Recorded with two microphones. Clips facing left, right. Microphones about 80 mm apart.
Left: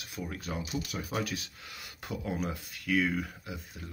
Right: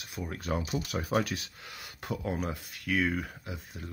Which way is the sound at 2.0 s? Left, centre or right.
Right.